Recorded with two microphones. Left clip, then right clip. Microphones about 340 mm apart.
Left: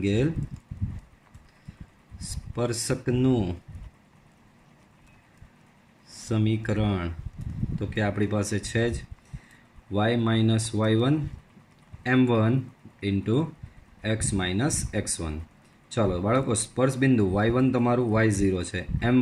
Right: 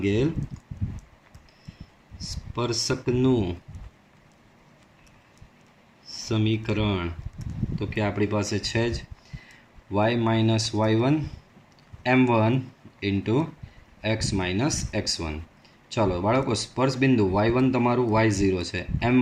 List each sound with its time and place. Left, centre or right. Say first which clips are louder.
0.0 s speech: right 2 dB; centre
2.3 s speech: right 1 dB; centre
6.1 s speech: right 2 dB; centre